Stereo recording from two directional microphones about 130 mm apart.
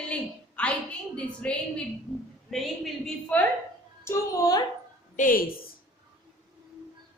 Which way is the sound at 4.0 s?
25° left (ahead or behind).